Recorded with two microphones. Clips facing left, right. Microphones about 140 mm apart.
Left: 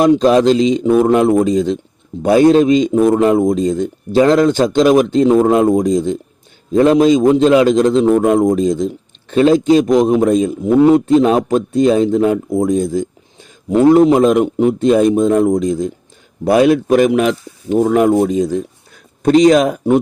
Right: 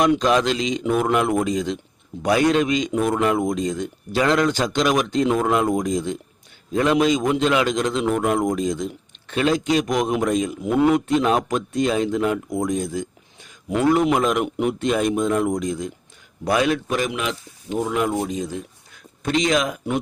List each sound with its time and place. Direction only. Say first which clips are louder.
0.0 s a man's voice: left 8 dB; 35° left (ahead or behind)
16.4 s a man's voice: left 9 dB; 40° left (ahead or behind)